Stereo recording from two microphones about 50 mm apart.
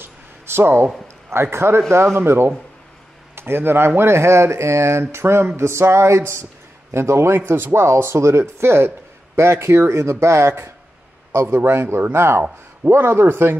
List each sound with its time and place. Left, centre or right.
0.0 s a sound: right
1.0 s a man's voice: right
5.1 s speech: right
5.6 s a sound: right
6.9 s speech: right
7.3 s a man's voice: right